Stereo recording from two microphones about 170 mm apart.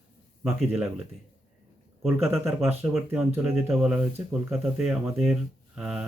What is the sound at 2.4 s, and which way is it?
Speech, 15° right (ahead or behind).